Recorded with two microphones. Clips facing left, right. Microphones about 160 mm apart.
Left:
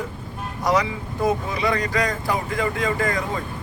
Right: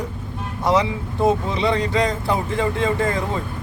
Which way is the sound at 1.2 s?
25° right (ahead or behind).